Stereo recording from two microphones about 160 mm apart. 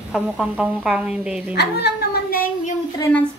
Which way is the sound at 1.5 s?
90° left.